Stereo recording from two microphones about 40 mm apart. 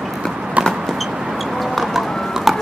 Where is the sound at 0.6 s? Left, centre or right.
Right.